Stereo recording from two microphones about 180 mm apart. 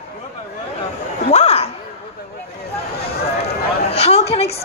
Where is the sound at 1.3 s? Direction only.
35° left (ahead or behind).